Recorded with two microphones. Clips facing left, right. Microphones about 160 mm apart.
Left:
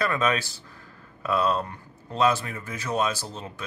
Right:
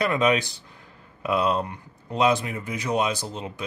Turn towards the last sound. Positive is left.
turn(degrees=-15)  # may be behind; listen again after turning